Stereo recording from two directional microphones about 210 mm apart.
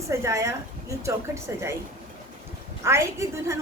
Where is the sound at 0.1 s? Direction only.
15° right (ahead or behind).